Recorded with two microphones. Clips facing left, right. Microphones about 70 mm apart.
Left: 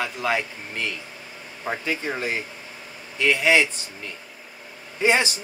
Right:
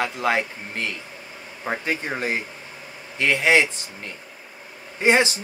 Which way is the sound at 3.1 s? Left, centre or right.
Right.